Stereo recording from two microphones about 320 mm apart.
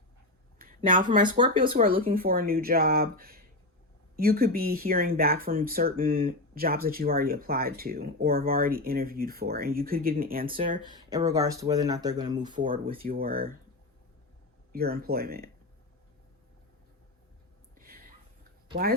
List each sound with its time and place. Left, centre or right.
0.6 s a sound: right
1.1 s speech: centre
1.7 s speech: right
10.8 s speech: centre
12.5 s speech: right
14.7 s speech: right
17.7 s a sound: right